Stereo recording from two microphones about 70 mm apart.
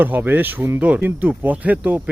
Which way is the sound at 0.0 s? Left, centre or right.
Right.